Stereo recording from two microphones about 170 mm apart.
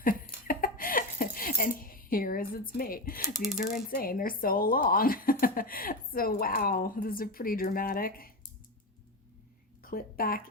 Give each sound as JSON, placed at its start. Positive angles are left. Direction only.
{"t": 0.0, "sound": "a sound", "side_deg": 55}
{"t": 3.3, "sound": "speech", "side_deg": 0}
{"t": 3.8, "sound": "a woman's voice", "side_deg": 60}
{"t": 9.8, "sound": "a woman's voice", "side_deg": 60}